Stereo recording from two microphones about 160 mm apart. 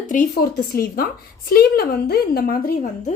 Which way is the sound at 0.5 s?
70° left (ahead or behind).